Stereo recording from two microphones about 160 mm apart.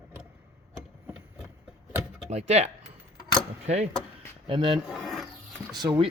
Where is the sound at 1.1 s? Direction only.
Centre (ahead or behind).